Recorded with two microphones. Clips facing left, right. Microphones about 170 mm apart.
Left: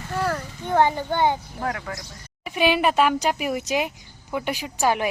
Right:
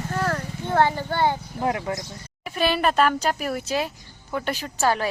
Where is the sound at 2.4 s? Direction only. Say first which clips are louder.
Left 2 dB; 15° left (ahead or behind).